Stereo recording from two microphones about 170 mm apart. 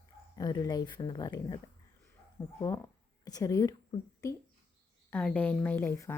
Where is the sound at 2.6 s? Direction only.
20° left (ahead or behind).